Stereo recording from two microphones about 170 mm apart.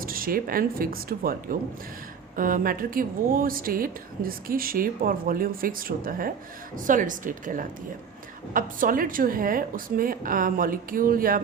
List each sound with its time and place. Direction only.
0.0 s a woman's voice: 60° right (ahead or behind)